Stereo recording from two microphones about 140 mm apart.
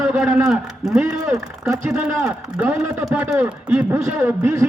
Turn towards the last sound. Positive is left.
turn(degrees=-15)  # may be behind; listen again after turning